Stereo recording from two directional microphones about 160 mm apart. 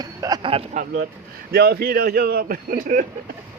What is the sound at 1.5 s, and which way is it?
Speech, 85° right.